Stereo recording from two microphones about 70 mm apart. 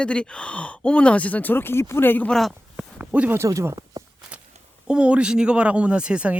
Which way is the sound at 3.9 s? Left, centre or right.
Right.